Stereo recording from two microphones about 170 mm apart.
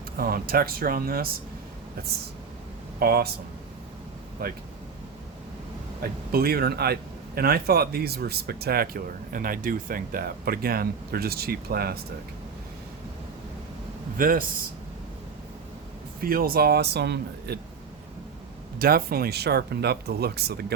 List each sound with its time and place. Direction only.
0.2 s a man's voice: 60° right (ahead or behind)
3.0 s a man's voice: 65° right (ahead or behind)
4.4 s a man's voice: 60° right (ahead or behind)
6.0 s a man's voice: 65° right (ahead or behind)
14.2 s a man's voice: 55° right (ahead or behind)
16.2 s speech: 60° right (ahead or behind)
18.8 s speech: 60° right (ahead or behind)